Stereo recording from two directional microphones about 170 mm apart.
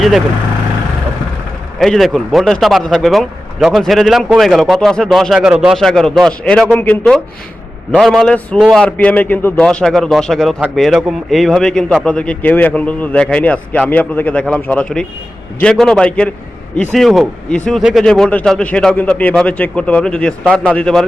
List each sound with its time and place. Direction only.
1.8 s a man's voice: centre (ahead or behind)